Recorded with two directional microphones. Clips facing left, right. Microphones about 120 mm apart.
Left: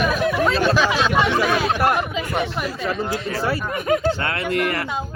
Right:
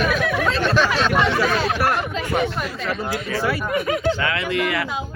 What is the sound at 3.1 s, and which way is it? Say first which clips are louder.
Speech: even; 30° left (ahead or behind).